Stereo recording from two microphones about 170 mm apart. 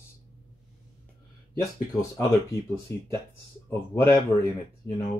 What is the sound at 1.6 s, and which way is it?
Speech, 20° left (ahead or behind).